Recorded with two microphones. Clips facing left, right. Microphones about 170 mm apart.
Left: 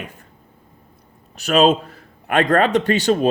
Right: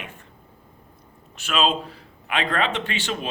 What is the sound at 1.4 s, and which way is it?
A man's voice, 40° left (ahead or behind).